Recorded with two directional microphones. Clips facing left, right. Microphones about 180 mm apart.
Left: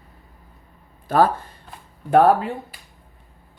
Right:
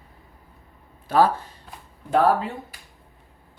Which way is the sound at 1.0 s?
50° left (ahead or behind).